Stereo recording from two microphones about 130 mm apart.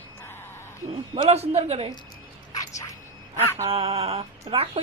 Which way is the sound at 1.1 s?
55° right (ahead or behind).